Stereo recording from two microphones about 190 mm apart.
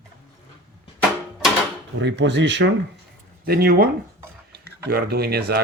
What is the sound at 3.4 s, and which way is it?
Speech, 55° right (ahead or behind).